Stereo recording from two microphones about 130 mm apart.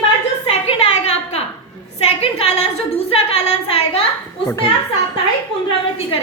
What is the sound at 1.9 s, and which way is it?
A woman's voice, 50° left (ahead or behind).